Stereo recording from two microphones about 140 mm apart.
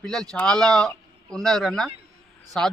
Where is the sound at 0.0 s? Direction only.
5° left (ahead or behind).